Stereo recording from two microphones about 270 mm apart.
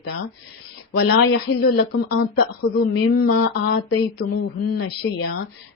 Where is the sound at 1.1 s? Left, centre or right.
Left.